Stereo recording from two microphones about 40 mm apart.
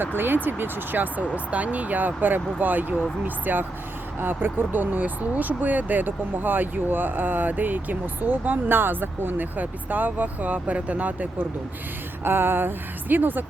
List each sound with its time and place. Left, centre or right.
0.0 s speech: right
1.5 s speech: right
4.2 s speech: right
12.2 s speech: right